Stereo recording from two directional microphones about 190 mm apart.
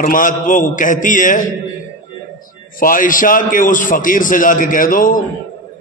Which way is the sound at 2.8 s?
45° left (ahead or behind).